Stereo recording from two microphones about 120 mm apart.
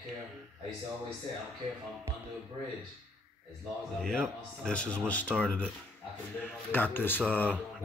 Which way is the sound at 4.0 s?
5° left (ahead or behind).